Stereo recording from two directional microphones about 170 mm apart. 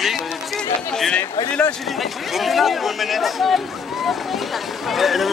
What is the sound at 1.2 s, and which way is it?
Speech, 20° left (ahead or behind).